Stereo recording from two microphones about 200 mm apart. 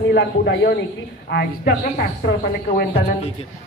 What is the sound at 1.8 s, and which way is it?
Speech, 45° left (ahead or behind).